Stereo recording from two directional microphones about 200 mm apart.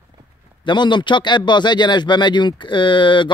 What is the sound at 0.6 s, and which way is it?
Speech, 25° left (ahead or behind).